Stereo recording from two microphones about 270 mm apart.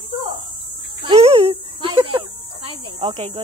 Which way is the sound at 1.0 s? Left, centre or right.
Right.